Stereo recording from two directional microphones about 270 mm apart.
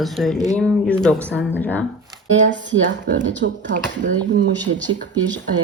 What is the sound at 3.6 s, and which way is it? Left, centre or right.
Speech, right.